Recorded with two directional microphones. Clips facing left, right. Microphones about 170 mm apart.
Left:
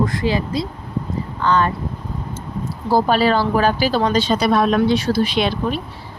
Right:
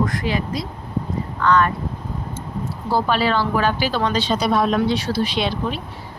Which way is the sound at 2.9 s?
40° left (ahead or behind).